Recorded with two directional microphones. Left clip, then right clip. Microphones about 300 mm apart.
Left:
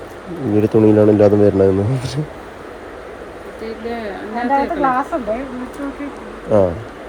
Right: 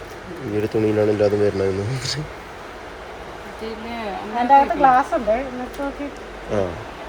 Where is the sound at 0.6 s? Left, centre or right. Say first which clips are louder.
Left 7 dB; left.